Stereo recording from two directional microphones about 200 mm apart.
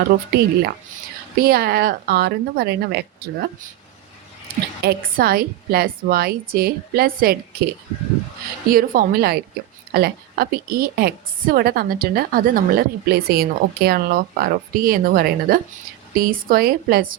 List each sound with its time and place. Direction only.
0.0 s a woman's voice: 55° right (ahead or behind)
4.8 s a woman's voice: 50° right (ahead or behind)
8.7 s a woman's voice: 50° right (ahead or behind)